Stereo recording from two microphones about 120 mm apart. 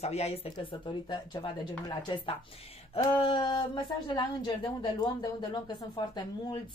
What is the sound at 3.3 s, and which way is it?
A woman's voice, 40° left (ahead or behind).